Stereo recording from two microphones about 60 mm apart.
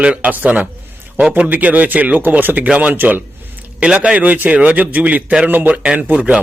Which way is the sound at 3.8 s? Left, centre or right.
Centre.